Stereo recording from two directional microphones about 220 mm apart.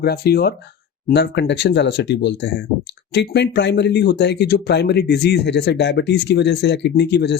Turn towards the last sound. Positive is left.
turn(degrees=50)  # may be behind; listen again after turning